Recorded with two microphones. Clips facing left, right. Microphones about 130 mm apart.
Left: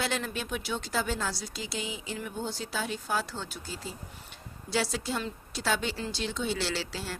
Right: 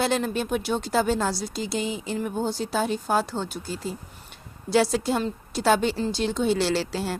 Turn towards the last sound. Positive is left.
turn(degrees=-50)  # may be behind; listen again after turning